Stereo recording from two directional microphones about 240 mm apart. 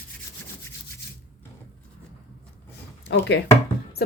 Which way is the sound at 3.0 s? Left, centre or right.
Left.